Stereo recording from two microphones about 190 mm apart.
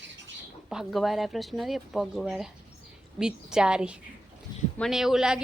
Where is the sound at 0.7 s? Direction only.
Centre (ahead or behind).